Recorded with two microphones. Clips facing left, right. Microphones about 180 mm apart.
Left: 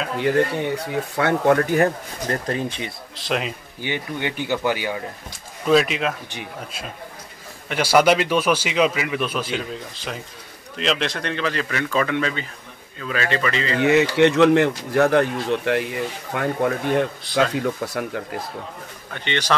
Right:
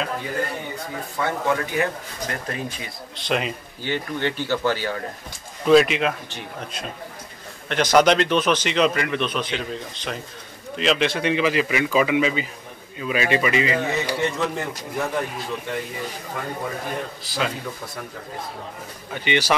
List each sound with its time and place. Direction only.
0.2 s speech: 75° left (ahead or behind); by 2.9 s 30° left (ahead or behind)
3.2 s speech: centre (ahead or behind)
3.8 s a man's voice: 15° left (ahead or behind)
5.7 s speech: centre (ahead or behind)
7.6 s a man's voice: 5° left (ahead or behind); by 13.7 s 15° right (ahead or behind)
13.7 s a man's voice: 80° left
17.3 s speech: centre (ahead or behind)
17.6 s a man's voice: 80° left
19.1 s speech: 10° right (ahead or behind)